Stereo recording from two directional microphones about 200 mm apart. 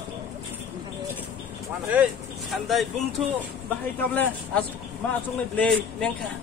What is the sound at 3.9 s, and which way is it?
Speech, 10° left (ahead or behind).